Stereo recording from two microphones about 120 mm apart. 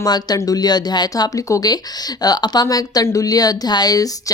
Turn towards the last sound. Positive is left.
turn(degrees=30)  # may be behind; listen again after turning